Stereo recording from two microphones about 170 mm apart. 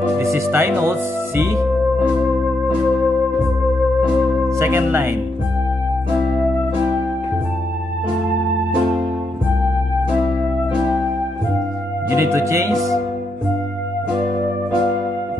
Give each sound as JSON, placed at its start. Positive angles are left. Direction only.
{"t": 0.2, "sound": "speech", "side_deg": -15}
{"t": 4.6, "sound": "speech", "side_deg": -15}
{"t": 12.1, "sound": "speech", "side_deg": -15}